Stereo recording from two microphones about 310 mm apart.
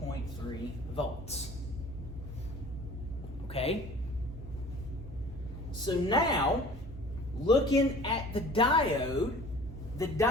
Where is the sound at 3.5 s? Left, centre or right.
Centre.